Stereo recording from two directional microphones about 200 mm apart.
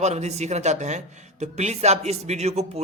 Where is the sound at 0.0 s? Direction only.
35° right (ahead or behind).